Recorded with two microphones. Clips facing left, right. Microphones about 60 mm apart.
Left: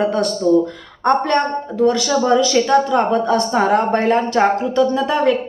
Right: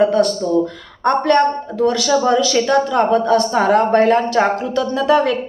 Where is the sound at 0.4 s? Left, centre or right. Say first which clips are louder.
Left 3 dB; left.